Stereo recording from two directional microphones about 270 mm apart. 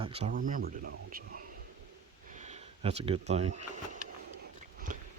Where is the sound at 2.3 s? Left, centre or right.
Right.